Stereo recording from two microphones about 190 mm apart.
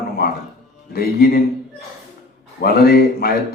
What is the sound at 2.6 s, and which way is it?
Speech, 55° left (ahead or behind).